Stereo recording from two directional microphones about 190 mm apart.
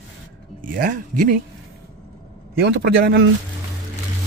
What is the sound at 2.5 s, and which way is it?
Speech, 65° right (ahead or behind).